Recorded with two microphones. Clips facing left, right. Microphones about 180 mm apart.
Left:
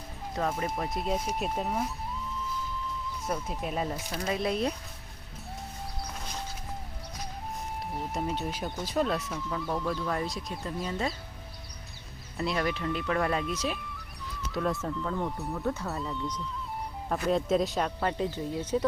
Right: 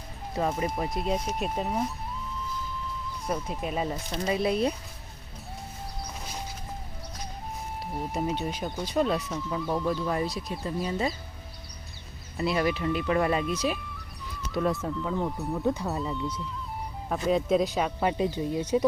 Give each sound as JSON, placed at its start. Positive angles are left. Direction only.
{"t": 0.3, "sound": "speech", "side_deg": -5}
{"t": 3.2, "sound": "speech", "side_deg": 0}
{"t": 7.9, "sound": "speech", "side_deg": 0}
{"t": 12.4, "sound": "speech", "side_deg": -5}
{"t": 16.0, "sound": "speech", "side_deg": -5}